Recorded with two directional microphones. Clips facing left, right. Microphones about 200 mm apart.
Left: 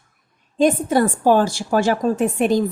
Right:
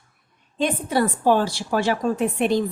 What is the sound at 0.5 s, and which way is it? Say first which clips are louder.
Speech: left 6 dB; 45° left (ahead or behind).